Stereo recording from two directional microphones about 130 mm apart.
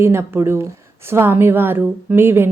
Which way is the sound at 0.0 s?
20° right (ahead or behind).